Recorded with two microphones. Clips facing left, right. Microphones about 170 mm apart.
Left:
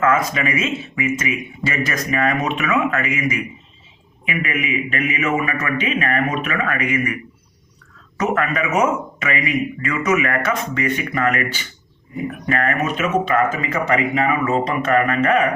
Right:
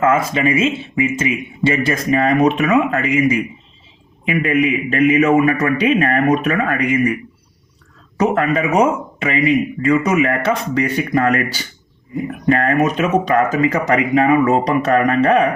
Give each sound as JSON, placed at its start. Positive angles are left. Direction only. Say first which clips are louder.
{"t": 0.0, "sound": "speech", "louder": "right 3 dB", "side_deg": -30}
{"t": 8.2, "sound": "speech", "louder": "right 4 dB", "side_deg": -30}